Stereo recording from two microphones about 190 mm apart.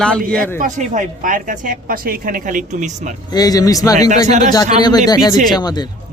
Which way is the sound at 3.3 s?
20° left (ahead or behind).